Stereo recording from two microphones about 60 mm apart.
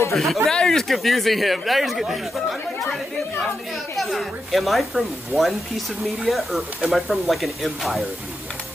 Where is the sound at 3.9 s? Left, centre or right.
Centre.